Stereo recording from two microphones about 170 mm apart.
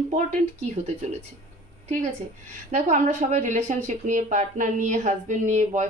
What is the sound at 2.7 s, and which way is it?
Speech, 45° right (ahead or behind).